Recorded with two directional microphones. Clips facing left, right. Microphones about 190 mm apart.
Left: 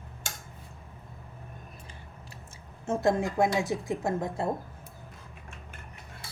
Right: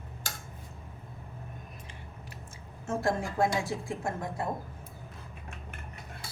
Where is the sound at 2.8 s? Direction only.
20° left (ahead or behind).